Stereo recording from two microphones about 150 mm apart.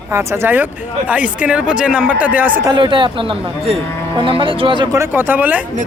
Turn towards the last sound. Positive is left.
turn(degrees=-10)  # may be behind; listen again after turning